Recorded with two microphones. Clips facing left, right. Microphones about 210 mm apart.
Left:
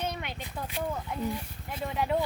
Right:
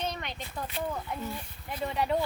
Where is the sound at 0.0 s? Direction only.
10° left (ahead or behind).